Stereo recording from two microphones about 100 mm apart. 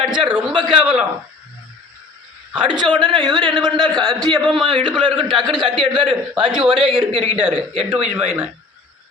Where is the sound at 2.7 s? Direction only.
45° right (ahead or behind); by 7.3 s 75° right (ahead or behind).